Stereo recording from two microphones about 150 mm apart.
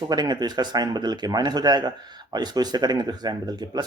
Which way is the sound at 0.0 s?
30° right (ahead or behind).